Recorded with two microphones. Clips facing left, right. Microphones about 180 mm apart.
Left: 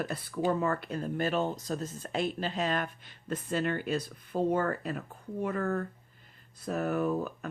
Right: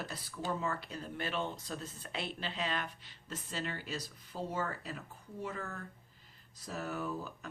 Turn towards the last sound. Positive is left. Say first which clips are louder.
# left 9 dB
turn(degrees=55)  # may be behind; listen again after turning